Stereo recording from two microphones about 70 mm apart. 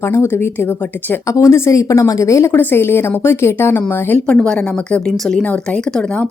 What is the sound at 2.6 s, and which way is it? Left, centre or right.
Speech, left.